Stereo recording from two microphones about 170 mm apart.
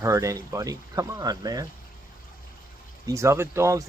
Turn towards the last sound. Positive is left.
turn(degrees=-15)  # may be behind; listen again after turning